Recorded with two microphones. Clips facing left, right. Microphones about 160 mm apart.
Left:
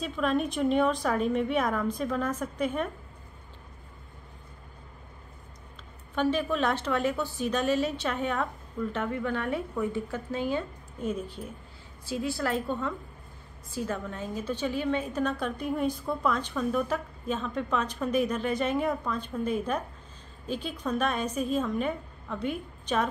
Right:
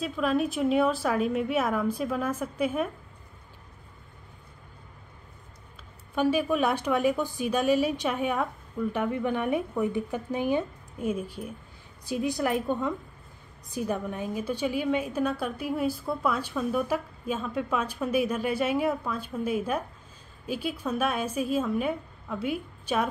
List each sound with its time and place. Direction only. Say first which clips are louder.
0.0 s a woman's voice: right 1 dB; 5° right (ahead or behind)
6.1 s a woman's voice: right 2 dB; 10° right (ahead or behind)